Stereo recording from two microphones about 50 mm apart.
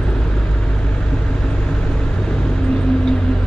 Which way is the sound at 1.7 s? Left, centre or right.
Centre.